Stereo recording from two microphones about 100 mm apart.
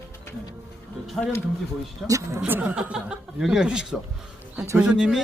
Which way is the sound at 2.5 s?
20° right (ahead or behind).